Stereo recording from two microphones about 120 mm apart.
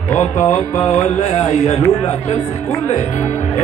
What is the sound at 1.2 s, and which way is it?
Speech, 65° left (ahead or behind).